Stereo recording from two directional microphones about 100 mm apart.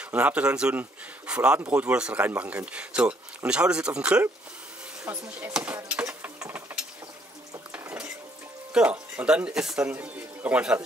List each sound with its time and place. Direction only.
0.0 s speech: 15° right (ahead or behind)
5.0 s speech: 30° right (ahead or behind)
5.5 s speech: 10° right (ahead or behind)
6.0 s stir: 25° right (ahead or behind)
7.7 s dishes: 15° right (ahead or behind)
8.7 s speech: 15° right (ahead or behind)